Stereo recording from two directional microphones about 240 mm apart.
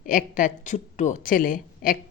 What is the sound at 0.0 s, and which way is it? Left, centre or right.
A woman's voice, left.